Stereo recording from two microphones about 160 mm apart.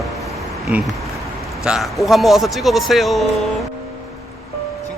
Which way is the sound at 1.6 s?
Centre (ahead or behind).